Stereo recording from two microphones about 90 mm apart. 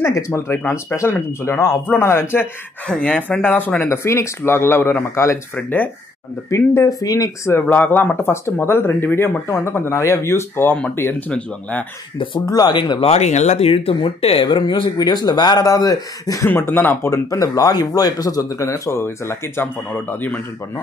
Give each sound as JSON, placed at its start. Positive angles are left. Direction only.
{"t": 0.0, "sound": "speech", "side_deg": 30}
{"t": 2.9, "sound": "speech", "side_deg": 15}
{"t": 7.6, "sound": "speech", "side_deg": 20}
{"t": 12.4, "sound": "speech", "side_deg": 45}
{"t": 13.7, "sound": "speech", "side_deg": 90}
{"t": 15.0, "sound": "speech", "side_deg": 50}
{"t": 15.7, "sound": "speech", "side_deg": 40}
{"t": 16.4, "sound": "speech", "side_deg": 25}
{"t": 17.3, "sound": "speech", "side_deg": 40}